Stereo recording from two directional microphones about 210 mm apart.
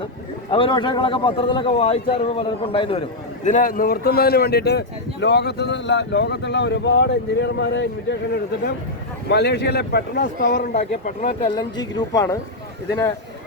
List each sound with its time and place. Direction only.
0.5 s a man's voice: 25° left (ahead or behind)
3.4 s speech: 40° left (ahead or behind); by 7.9 s 55° left (ahead or behind)
9.3 s speech: 50° left (ahead or behind)
11.5 s a woman's voice: 20° left (ahead or behind)